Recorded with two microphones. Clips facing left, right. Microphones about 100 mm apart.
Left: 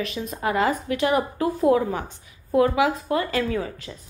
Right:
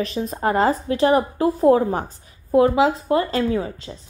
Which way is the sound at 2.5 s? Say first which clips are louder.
Right 4 dB; 25° right (ahead or behind).